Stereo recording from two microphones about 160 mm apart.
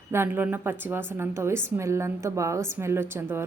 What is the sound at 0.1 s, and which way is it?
Speech, 15° right (ahead or behind).